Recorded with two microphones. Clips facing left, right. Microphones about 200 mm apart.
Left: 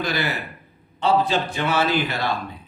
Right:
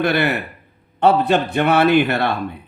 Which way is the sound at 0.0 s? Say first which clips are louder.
Right 7 dB; 60° right (ahead or behind).